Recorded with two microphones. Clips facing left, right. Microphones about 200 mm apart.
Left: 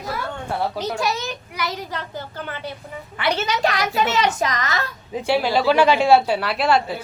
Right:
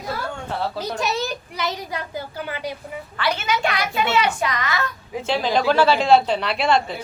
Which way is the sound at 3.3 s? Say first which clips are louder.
Left 3 dB; 40° left (ahead or behind).